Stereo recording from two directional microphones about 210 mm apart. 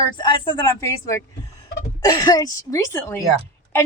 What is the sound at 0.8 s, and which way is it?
A woman's voice, 15° left (ahead or behind).